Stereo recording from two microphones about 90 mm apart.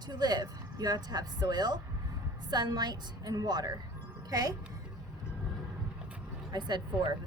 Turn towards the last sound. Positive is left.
turn(degrees=-55)  # may be behind; listen again after turning